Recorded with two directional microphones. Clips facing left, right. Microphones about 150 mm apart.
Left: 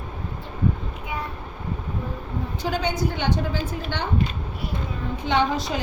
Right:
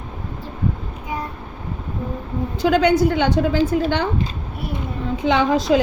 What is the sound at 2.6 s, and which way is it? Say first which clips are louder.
A woman's voice: right 10 dB; 90° right.